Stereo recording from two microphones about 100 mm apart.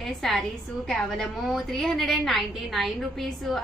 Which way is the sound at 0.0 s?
Centre (ahead or behind).